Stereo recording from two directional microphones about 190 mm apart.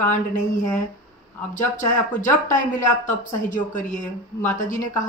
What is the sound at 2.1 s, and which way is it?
A woman's voice, 40° left (ahead or behind).